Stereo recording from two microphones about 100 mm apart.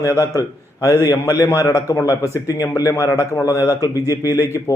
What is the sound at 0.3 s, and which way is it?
A man's voice, 35° left (ahead or behind).